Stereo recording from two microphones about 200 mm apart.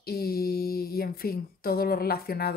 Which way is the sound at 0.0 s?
50° left (ahead or behind).